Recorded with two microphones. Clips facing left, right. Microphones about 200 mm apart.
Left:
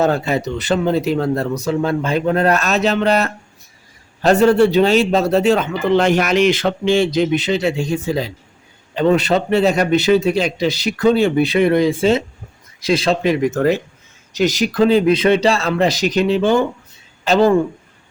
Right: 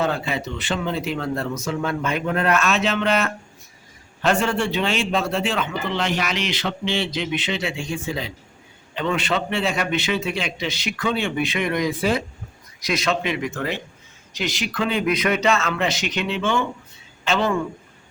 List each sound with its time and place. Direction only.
0.0 s a man's voice: 40° left (ahead or behind)